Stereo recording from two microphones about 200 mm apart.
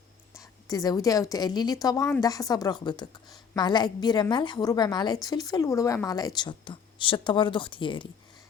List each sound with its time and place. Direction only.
0.7 s a woman's voice: 20° left (ahead or behind)